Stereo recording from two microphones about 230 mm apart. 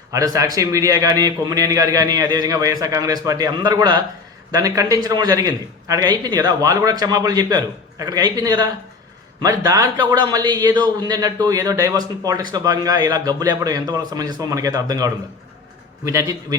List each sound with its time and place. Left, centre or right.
0.1 s a man's voice: centre